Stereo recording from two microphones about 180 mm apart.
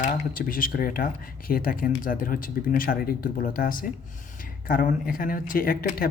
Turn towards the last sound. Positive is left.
turn(degrees=55)  # may be behind; listen again after turning